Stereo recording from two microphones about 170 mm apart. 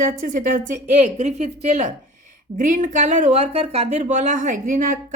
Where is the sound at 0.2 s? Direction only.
50° right (ahead or behind).